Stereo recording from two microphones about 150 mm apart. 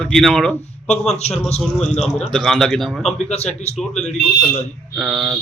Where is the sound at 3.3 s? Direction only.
45° left (ahead or behind).